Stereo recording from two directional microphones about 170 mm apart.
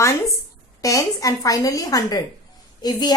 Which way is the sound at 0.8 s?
20° left (ahead or behind).